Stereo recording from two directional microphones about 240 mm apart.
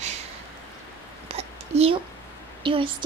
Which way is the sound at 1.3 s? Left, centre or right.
Right.